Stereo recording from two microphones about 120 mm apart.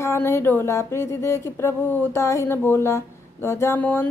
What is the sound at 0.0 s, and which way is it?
Speech, 20° left (ahead or behind).